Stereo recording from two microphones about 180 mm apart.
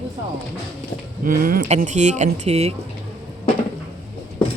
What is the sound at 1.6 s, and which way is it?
Speech, 40° right (ahead or behind).